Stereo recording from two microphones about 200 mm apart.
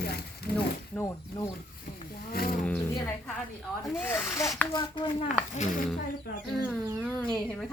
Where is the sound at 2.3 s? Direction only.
45° left (ahead or behind).